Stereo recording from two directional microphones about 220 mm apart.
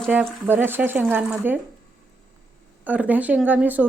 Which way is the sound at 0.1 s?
10° right (ahead or behind).